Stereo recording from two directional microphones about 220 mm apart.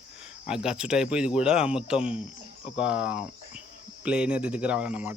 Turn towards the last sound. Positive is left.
turn(degrees=-5)  # may be behind; listen again after turning